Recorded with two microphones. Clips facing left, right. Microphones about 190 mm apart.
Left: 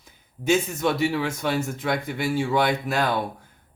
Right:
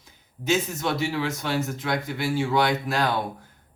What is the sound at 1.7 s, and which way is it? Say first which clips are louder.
A man's voice: left 1 dB; 50° left (ahead or behind).